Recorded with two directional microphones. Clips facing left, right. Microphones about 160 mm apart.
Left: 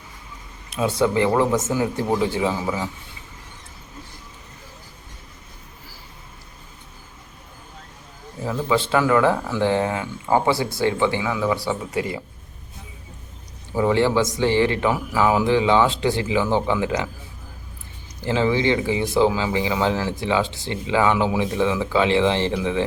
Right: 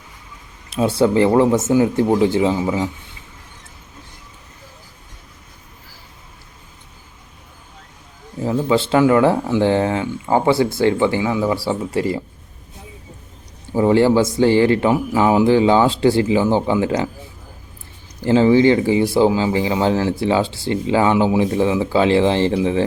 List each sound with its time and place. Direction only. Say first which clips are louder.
0.7 s speech: right 4 dB; 30° right (ahead or behind)
8.4 s speech: right 4 dB; 30° right (ahead or behind)
13.7 s speech: right 5 dB; 35° right (ahead or behind)
18.3 s speech: right 7 dB; 35° right (ahead or behind)